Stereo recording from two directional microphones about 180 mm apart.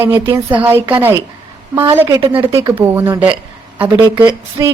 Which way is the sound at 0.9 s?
10° right (ahead or behind).